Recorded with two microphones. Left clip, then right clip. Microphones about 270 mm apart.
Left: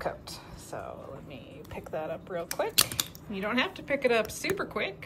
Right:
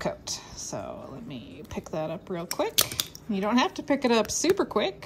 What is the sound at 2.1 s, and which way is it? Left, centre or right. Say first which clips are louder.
A woman's voice: right 1 dB; right.